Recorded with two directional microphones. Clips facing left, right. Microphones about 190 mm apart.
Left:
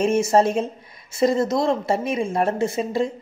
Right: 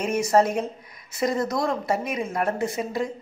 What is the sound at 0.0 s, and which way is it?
A woman's voice, 25° left (ahead or behind).